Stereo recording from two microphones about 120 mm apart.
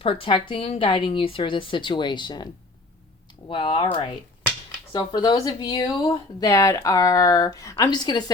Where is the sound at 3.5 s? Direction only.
45° left (ahead or behind).